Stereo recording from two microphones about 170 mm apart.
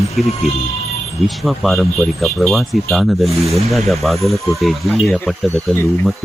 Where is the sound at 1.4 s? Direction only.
Centre (ahead or behind).